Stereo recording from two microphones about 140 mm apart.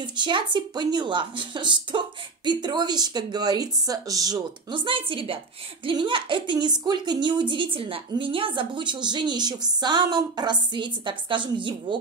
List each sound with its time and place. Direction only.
0.0 s a woman's voice: 35° right (ahead or behind)